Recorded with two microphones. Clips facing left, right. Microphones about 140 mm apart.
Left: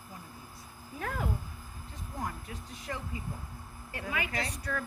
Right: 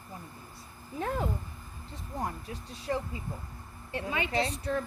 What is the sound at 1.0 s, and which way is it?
Speech, 25° right (ahead or behind).